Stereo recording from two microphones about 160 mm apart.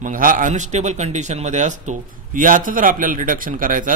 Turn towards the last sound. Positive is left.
turn(degrees=-55)  # may be behind; listen again after turning